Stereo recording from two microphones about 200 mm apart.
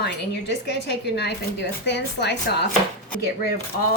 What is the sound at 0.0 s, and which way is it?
Speech, 60° left (ahead or behind).